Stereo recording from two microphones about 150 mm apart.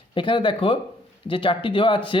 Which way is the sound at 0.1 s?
35° left (ahead or behind).